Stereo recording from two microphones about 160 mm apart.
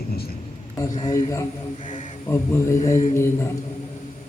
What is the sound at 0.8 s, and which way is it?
A man's voice, 20° left (ahead or behind).